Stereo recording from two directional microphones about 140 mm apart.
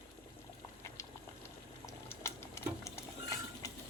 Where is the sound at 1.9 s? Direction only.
20° left (ahead or behind).